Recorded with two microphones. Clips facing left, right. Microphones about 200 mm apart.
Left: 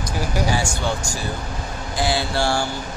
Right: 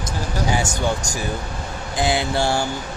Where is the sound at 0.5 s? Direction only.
20° right (ahead or behind).